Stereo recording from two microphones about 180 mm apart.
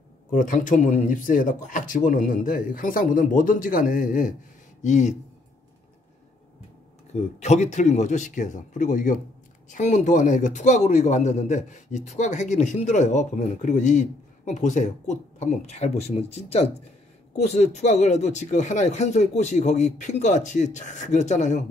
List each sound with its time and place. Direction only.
0.3 s a man's voice: 45° left (ahead or behind)
7.3 s a man's voice: 40° left (ahead or behind)